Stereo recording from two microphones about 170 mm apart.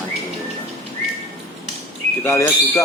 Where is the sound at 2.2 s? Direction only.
15° left (ahead or behind).